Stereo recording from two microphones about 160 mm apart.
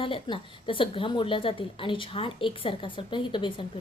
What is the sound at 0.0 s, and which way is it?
A woman's voice, 30° left (ahead or behind).